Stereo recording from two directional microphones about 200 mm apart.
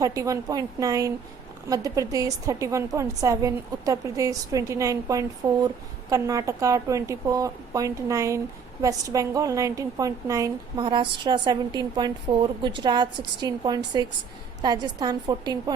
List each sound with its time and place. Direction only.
0.0 s a woman's voice: 15° right (ahead or behind)